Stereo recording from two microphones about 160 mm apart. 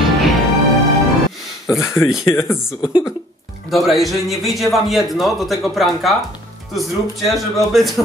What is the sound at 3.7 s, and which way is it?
Speech, centre (ahead or behind).